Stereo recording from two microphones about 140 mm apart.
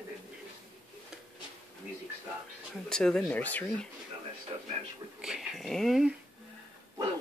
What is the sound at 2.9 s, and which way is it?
Speech, 5° left (ahead or behind).